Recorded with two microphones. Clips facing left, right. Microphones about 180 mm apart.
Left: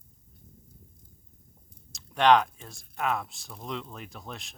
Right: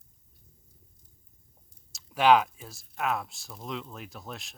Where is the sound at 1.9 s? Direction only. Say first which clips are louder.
Even; 5° right (ahead or behind).